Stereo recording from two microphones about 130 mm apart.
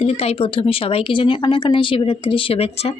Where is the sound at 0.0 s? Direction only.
50° left (ahead or behind).